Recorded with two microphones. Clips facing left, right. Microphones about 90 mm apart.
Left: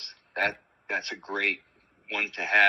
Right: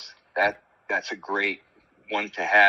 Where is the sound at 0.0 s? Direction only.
25° right (ahead or behind).